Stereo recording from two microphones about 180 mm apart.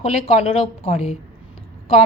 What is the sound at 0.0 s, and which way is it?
A woman's voice, 35° left (ahead or behind).